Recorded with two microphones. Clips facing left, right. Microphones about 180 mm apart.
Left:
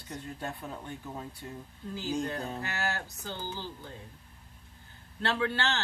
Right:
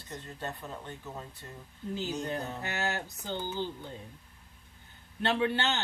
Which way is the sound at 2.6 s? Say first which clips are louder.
Right 1 dB; 20° right (ahead or behind).